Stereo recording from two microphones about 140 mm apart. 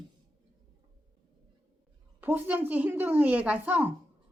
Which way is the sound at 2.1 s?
10° right (ahead or behind).